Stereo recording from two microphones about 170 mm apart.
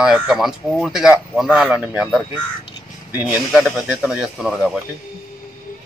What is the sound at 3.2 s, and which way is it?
Speech, 10° right (ahead or behind).